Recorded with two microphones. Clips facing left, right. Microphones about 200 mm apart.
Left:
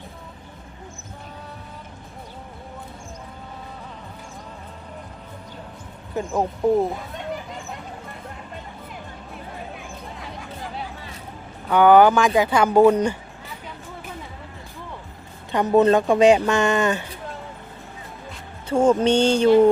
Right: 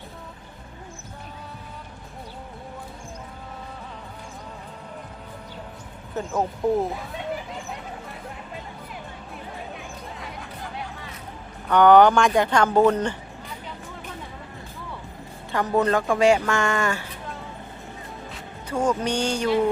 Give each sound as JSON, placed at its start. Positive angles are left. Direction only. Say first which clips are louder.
{"t": 6.2, "sound": "speech", "louder": "left 3 dB", "side_deg": 10}
{"t": 6.7, "sound": "a sound", "louder": "left 4 dB", "side_deg": 0}
{"t": 9.3, "sound": "music", "louder": "left 1 dB", "side_deg": 0}
{"t": 11.7, "sound": "speech", "louder": "left 1 dB", "side_deg": 5}
{"t": 15.5, "sound": "speech", "louder": "left 5 dB", "side_deg": 20}
{"t": 18.7, "sound": "speech", "louder": "left 7 dB", "side_deg": 25}